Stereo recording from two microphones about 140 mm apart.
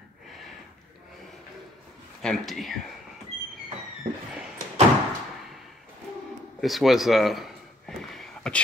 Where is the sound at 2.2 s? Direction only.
Centre (ahead or behind).